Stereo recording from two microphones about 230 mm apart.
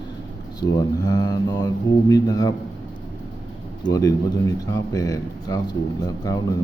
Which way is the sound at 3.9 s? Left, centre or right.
Centre.